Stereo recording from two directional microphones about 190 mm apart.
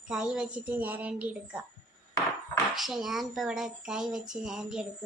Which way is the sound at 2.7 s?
Centre (ahead or behind).